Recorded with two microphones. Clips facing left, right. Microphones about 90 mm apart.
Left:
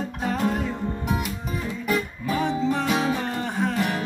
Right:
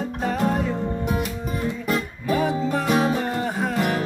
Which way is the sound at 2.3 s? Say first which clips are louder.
Right 2 dB; 5° right (ahead or behind).